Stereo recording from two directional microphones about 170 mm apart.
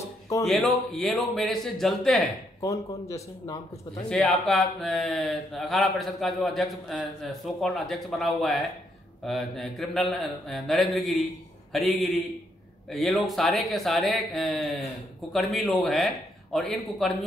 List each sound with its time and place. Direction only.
0.5 s speech: centre (ahead or behind)
2.6 s a man's voice: 20° left (ahead or behind)
4.1 s speech: centre (ahead or behind)